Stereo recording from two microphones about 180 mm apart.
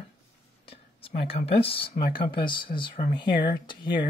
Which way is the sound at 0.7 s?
30° left (ahead or behind).